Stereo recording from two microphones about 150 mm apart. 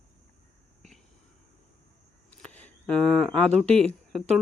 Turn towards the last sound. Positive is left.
turn(degrees=5)  # may be behind; listen again after turning